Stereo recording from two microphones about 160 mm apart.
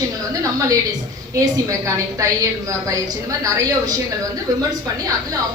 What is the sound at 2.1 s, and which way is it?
A woman's voice, 20° right (ahead or behind).